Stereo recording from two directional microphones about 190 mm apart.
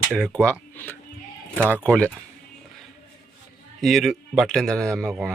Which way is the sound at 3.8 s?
Centre (ahead or behind).